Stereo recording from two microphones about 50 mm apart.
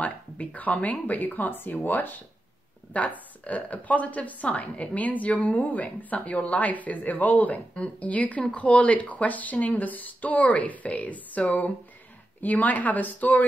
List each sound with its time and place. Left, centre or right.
0.0 s a woman's voice: left